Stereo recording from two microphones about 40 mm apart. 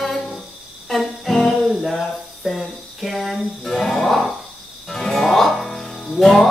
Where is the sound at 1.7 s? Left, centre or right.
Centre.